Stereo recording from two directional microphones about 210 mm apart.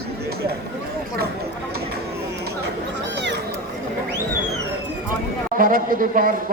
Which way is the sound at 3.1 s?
55° right (ahead or behind).